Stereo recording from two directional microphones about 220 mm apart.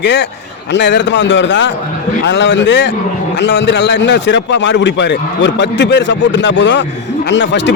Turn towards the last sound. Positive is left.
turn(degrees=55)  # may be behind; listen again after turning